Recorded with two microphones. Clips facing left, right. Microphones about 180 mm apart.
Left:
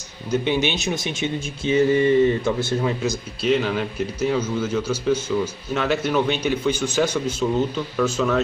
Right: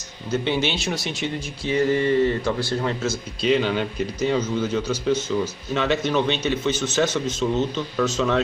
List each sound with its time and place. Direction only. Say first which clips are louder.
0.3 s speech: left 2 dB; 15° left (ahead or behind)
3.4 s speech: even; centre (ahead or behind)